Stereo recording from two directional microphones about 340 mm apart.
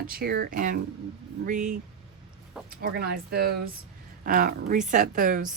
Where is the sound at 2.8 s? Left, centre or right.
Right.